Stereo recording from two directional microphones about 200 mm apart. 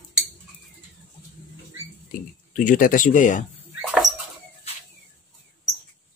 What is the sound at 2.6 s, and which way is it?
Speech, 45° left (ahead or behind).